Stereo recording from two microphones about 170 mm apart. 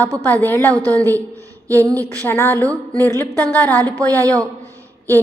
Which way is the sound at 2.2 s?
10° left (ahead or behind).